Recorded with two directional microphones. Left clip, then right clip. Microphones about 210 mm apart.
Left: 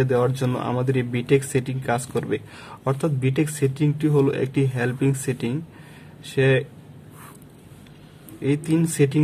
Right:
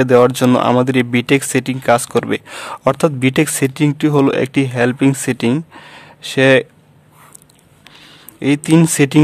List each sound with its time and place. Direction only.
0.0 s speech: 45° right (ahead or behind)
8.4 s speech: 40° right (ahead or behind)